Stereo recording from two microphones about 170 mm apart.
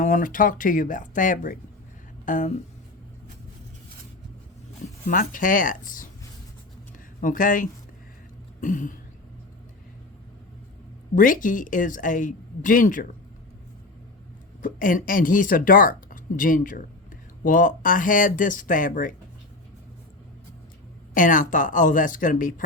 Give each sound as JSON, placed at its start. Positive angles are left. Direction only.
{"t": 0.0, "sound": "speech", "side_deg": 50}
{"t": 5.0, "sound": "speech", "side_deg": 50}
{"t": 7.2, "sound": "speech", "side_deg": 50}
{"t": 11.1, "sound": "speech", "side_deg": 50}
{"t": 14.6, "sound": "speech", "side_deg": 55}
{"t": 21.1, "sound": "speech", "side_deg": 50}